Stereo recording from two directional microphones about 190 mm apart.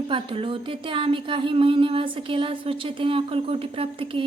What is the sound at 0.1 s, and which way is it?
Speech, 25° right (ahead or behind).